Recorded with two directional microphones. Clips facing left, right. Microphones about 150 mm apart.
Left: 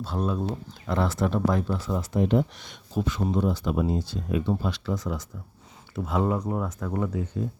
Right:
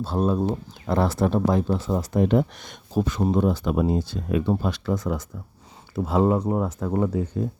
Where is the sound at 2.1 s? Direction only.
60° right (ahead or behind); by 3.3 s 40° right (ahead or behind).